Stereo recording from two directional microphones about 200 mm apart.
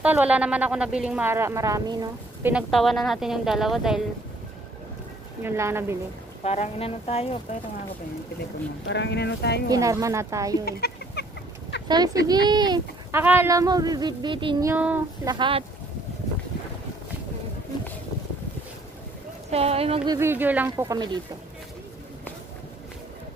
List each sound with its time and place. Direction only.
0.0 s a woman's voice: 5° right (ahead or behind)
2.5 s speech: centre (ahead or behind)
5.4 s a woman's voice: 10° right (ahead or behind)
6.4 s speech: 30° left (ahead or behind)
8.8 s speech: 60° left (ahead or behind)
9.7 s a woman's voice: 15° right (ahead or behind)
10.6 s chicken: 55° left (ahead or behind)
11.9 s a sound: 20° right (ahead or behind)
14.7 s a woman's voice: 10° right (ahead or behind)
15.2 s a sound: 25° right (ahead or behind)
19.5 s a sound: 30° right (ahead or behind)
20.2 s a woman's voice: 10° right (ahead or behind)